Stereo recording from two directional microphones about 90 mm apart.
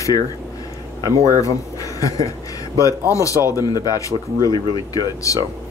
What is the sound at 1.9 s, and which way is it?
Speech, 40° left (ahead or behind).